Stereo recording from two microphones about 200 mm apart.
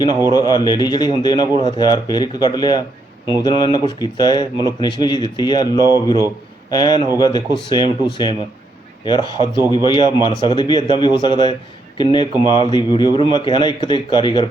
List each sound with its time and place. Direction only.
0.3 s speech: 20° left (ahead or behind)